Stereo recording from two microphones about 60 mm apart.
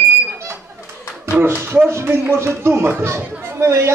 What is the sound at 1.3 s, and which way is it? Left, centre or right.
Speech, right.